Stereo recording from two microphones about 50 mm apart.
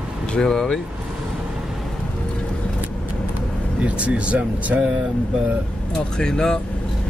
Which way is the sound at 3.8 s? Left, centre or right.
Right.